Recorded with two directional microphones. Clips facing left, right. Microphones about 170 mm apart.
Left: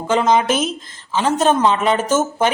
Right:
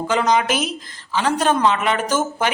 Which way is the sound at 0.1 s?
25° left (ahead or behind).